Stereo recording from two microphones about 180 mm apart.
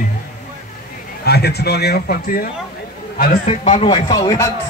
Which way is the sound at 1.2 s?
60° left (ahead or behind).